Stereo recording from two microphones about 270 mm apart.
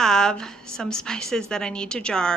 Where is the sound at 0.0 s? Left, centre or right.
Centre.